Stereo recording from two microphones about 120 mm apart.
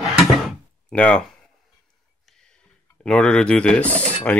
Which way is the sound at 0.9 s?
10° left (ahead or behind).